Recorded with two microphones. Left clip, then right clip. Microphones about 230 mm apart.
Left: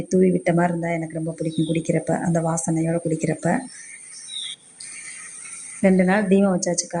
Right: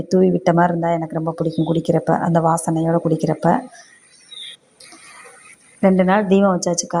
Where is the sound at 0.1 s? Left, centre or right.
Centre.